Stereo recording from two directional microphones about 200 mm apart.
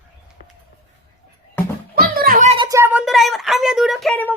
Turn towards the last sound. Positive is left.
turn(degrees=5)  # may be behind; listen again after turning